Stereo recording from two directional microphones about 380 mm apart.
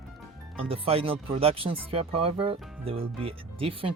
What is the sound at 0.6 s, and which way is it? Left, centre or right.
Speech, centre.